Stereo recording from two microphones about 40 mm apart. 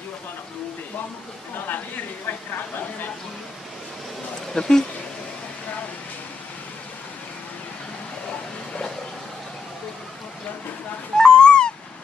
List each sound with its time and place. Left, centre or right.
2.2 s speech: left
4.6 s speech: centre
11.1 s cat: centre